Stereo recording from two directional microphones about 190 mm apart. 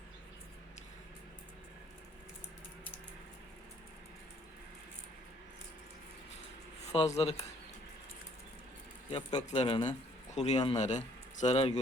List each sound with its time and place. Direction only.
6.9 s speech: 35° left (ahead or behind)
9.1 s a man's voice: 35° left (ahead or behind)